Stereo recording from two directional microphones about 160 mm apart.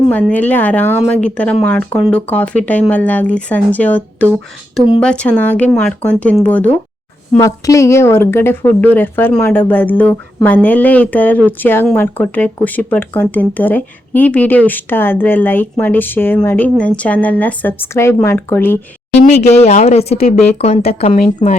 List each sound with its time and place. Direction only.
0.1 s speech: 10° left (ahead or behind)
19.3 s a woman's voice: 45° left (ahead or behind)